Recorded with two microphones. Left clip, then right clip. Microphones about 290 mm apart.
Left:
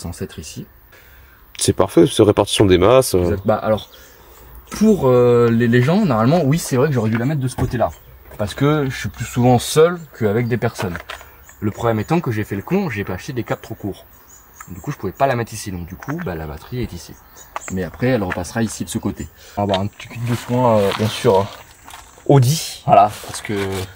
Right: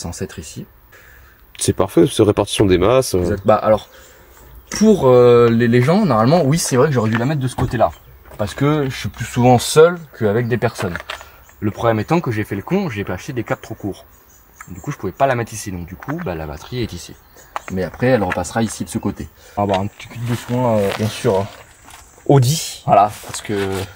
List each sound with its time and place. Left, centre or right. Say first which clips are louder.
1.7 s speech: left 1 dB; centre
3.4 s speech: right 4 dB; right
5.1 s speech: right 4 dB; right
8.4 s speech: even; centre
9.7 s speech: right 3 dB; centre
10.2 s speech: right 2 dB; centre
16.7 s speech: right 3 dB; right
18.1 s speech: right 4 dB; centre